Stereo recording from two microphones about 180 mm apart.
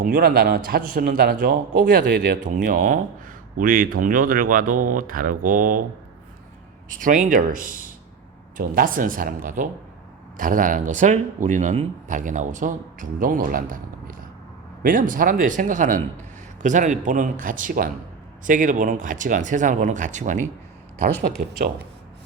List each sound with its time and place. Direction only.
0.0 s a man's voice: 55° right (ahead or behind)
7.0 s a man's voice: 50° right (ahead or behind)
21.5 s speech: 65° right (ahead or behind)